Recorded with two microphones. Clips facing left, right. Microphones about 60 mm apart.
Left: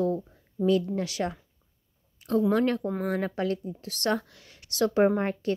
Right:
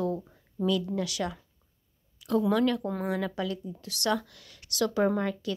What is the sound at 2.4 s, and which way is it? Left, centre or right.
Speech, left.